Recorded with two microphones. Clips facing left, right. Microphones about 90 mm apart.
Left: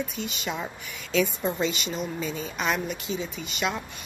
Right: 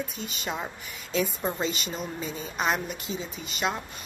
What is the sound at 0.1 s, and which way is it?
Speech, 40° right (ahead or behind).